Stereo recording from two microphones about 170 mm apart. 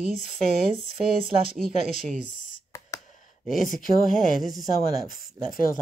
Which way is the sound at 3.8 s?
55° left (ahead or behind).